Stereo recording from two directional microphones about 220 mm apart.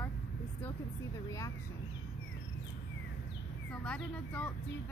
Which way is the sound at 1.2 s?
15° left (ahead or behind).